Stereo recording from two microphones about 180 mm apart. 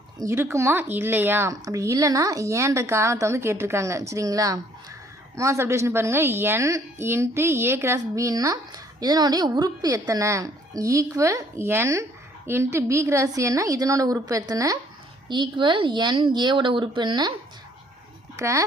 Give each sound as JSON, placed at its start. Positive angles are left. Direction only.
{"t": 0.2, "sound": "a woman's voice", "side_deg": -15}
{"t": 18.3, "sound": "speech", "side_deg": -15}